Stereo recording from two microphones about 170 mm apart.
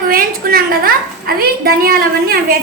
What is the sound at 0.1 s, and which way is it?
A woman's voice, 60° right (ahead or behind).